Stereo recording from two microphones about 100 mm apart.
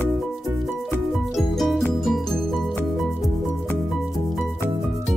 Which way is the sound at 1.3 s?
Centre (ahead or behind).